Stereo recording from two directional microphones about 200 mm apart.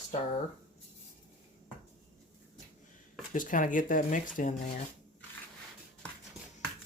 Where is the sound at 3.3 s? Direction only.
40° left (ahead or behind).